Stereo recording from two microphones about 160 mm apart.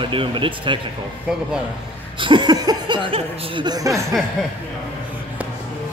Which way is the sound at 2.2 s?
30° right (ahead or behind).